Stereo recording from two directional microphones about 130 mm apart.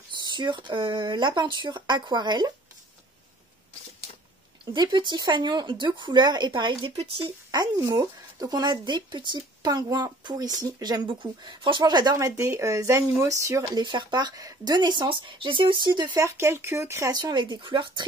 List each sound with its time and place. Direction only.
0.2 s speech: 35° right (ahead or behind)
4.9 s speech: 35° right (ahead or behind)
7.0 s speech: 45° right (ahead or behind)
7.5 s speech: 30° right (ahead or behind)
13.7 s speech: 35° right (ahead or behind)
16.2 s speech: 20° right (ahead or behind); by 18.0 s 40° right (ahead or behind)